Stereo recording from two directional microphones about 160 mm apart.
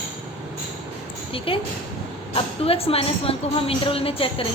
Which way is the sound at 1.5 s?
35° left (ahead or behind).